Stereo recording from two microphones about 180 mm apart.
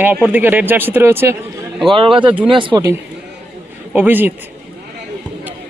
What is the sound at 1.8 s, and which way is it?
Speech, 30° right (ahead or behind).